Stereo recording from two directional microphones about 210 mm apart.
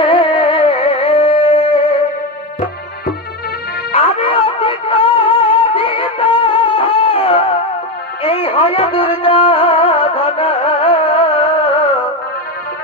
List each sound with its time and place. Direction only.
0.0 s music: 25° left (ahead or behind)
3.9 s music: 30° left (ahead or behind)